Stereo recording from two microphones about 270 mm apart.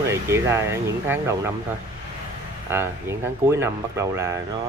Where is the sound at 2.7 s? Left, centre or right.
Centre.